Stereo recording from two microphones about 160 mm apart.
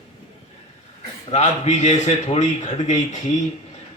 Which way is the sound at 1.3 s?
45° left (ahead or behind).